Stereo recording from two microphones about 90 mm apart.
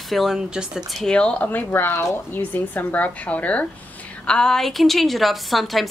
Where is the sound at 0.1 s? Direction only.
Centre (ahead or behind).